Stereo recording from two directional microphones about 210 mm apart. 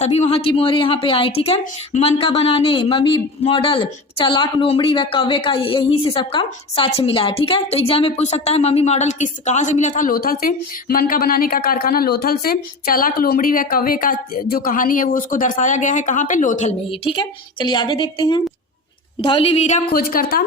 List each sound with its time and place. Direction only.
0.0 s a woman's voice: 30° left (ahead or behind)